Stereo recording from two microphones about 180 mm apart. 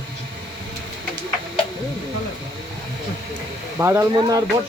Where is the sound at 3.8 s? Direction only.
15° right (ahead or behind).